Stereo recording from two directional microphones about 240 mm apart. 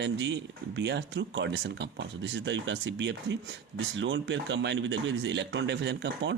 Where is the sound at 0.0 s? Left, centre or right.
Right.